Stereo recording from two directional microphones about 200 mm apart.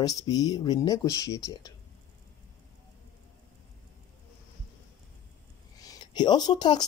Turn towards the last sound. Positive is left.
turn(degrees=20)  # may be behind; listen again after turning